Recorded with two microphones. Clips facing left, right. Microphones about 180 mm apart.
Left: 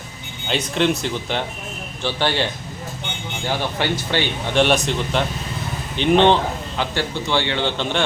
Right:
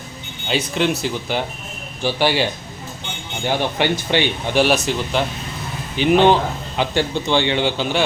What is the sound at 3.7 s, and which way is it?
Speech, 20° right (ahead or behind).